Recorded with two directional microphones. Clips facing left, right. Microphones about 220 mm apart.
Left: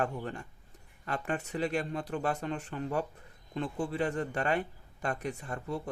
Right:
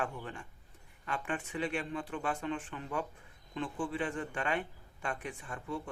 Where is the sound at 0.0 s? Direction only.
40° left (ahead or behind).